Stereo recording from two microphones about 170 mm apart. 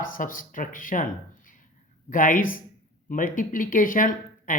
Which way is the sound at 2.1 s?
50° left (ahead or behind).